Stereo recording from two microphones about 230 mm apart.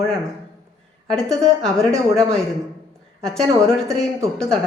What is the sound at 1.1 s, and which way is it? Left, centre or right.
A woman's voice, centre.